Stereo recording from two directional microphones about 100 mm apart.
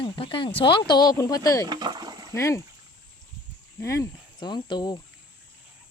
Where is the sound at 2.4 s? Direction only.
30° left (ahead or behind).